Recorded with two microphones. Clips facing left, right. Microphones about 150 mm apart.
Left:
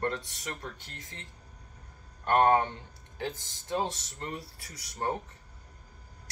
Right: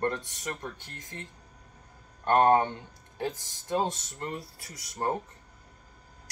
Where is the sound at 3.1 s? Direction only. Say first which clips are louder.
Right 3 dB; 45° right (ahead or behind).